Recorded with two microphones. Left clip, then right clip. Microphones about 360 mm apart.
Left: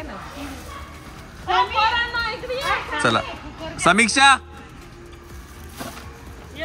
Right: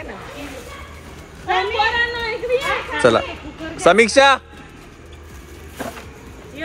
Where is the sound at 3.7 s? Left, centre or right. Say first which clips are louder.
Right 4 dB; centre.